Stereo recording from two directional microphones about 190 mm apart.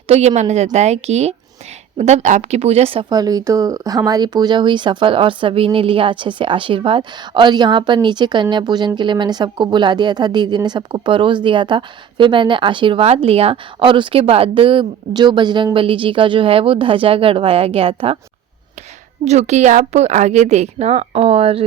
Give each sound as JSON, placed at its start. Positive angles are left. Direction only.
{"t": 0.1, "sound": "a woman's voice", "side_deg": -35}
{"t": 19.2, "sound": "a woman's voice", "side_deg": -35}